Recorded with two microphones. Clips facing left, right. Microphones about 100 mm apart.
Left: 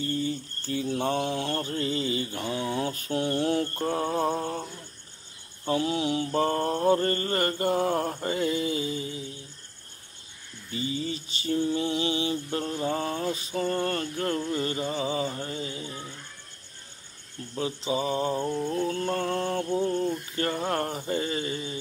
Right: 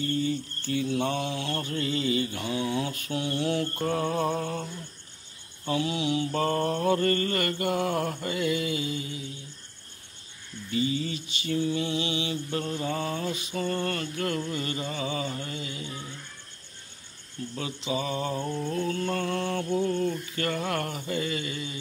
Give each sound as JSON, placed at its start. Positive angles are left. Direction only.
{"t": 0.0, "sound": "mantra", "side_deg": 30}
{"t": 3.8, "sound": "mantra", "side_deg": 30}
{"t": 5.7, "sound": "mantra", "side_deg": 40}
{"t": 6.3, "sound": "mantra", "side_deg": 30}
{"t": 10.7, "sound": "mantra", "side_deg": 30}
{"t": 17.6, "sound": "mantra", "side_deg": 35}
{"t": 18.4, "sound": "music", "side_deg": 15}
{"t": 18.7, "sound": "mantra", "side_deg": 30}